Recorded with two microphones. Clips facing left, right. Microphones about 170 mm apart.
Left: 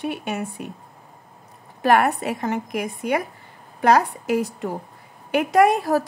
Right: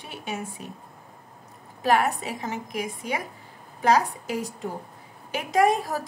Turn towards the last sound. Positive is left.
turn(degrees=65)  # may be behind; listen again after turning